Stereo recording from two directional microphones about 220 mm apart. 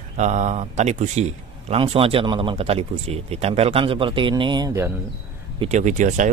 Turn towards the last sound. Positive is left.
turn(degrees=-35)  # may be behind; listen again after turning